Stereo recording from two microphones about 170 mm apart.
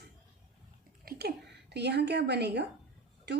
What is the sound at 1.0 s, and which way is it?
A woman's voice, 70° right (ahead or behind).